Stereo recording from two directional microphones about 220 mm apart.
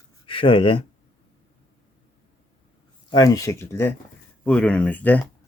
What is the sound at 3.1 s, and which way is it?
Speech, 15° left (ahead or behind).